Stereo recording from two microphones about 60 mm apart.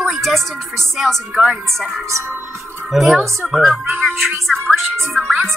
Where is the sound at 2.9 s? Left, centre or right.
Centre.